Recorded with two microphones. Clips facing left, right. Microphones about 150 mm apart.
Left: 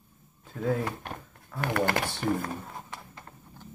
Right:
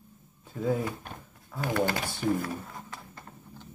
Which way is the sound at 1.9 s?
65° left (ahead or behind).